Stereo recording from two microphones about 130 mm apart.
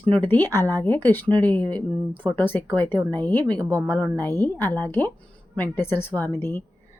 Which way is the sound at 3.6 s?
30° right (ahead or behind).